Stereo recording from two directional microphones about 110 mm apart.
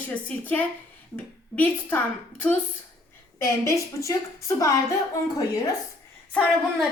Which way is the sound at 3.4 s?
30° left (ahead or behind).